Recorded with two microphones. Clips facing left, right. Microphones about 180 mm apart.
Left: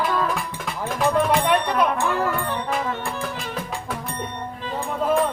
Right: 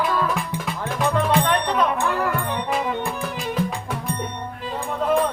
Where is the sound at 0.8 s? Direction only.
5° left (ahead or behind).